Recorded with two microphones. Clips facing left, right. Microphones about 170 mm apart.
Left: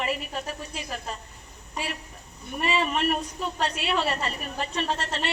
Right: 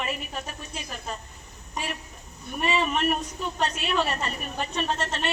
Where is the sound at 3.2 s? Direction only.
35° left (ahead or behind).